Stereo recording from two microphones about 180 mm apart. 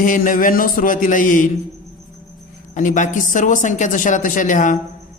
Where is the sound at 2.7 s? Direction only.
45° left (ahead or behind).